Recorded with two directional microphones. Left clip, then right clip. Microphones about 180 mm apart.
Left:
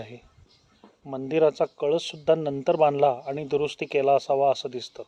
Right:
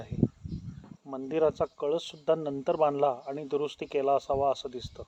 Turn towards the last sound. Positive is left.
turn(degrees=20)  # may be behind; listen again after turning